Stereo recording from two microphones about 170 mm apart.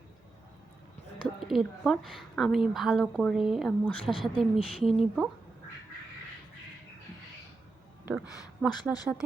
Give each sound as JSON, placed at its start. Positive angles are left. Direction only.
{"t": 1.5, "sound": "a woman's voice", "side_deg": 0}
{"t": 8.0, "sound": "speech", "side_deg": -10}
{"t": 8.7, "sound": "speech", "side_deg": 20}